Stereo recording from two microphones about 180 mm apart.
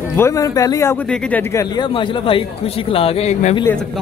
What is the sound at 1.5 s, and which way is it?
Speech, 20° left (ahead or behind).